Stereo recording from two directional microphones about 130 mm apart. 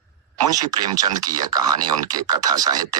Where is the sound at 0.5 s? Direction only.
30° right (ahead or behind).